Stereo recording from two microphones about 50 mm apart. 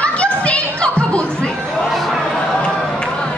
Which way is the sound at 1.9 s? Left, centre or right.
Centre.